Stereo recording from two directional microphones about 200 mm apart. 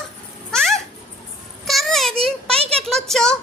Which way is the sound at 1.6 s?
Centre (ahead or behind).